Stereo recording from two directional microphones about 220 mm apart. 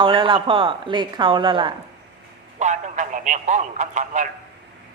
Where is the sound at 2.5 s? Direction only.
35° right (ahead or behind).